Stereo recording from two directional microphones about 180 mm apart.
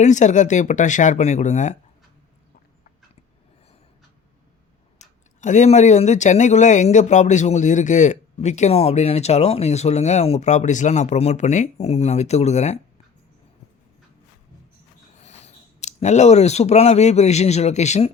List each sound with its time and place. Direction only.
0.0 s speech: 40° left (ahead or behind)
4.9 s speech: 40° left (ahead or behind)
15.2 s speech: 40° left (ahead or behind)